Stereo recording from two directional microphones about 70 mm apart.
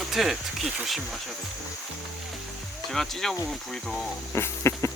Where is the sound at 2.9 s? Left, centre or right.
Centre.